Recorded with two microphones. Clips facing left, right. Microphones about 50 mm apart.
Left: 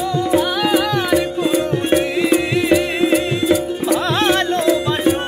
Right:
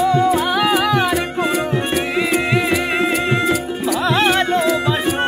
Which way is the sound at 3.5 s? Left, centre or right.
Centre.